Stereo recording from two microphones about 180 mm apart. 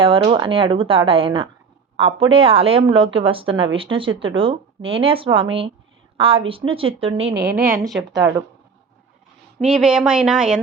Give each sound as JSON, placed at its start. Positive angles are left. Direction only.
{"t": 0.0, "sound": "speech", "side_deg": -30}
{"t": 7.4, "sound": "a woman's voice", "side_deg": -10}
{"t": 9.6, "sound": "speech", "side_deg": -5}